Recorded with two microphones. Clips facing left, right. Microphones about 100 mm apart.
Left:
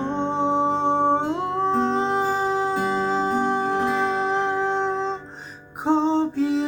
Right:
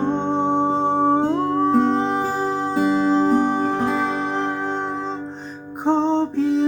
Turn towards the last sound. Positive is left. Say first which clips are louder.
# right 2 dB
turn(degrees=5)  # may be behind; listen again after turning